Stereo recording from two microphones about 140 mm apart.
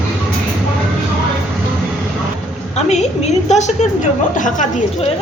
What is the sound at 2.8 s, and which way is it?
A woman's voice, 55° left (ahead or behind).